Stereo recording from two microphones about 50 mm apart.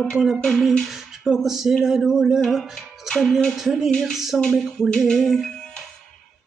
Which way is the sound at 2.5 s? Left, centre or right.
Centre.